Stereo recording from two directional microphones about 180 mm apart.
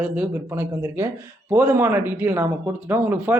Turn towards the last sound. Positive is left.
turn(degrees=-10)  # may be behind; listen again after turning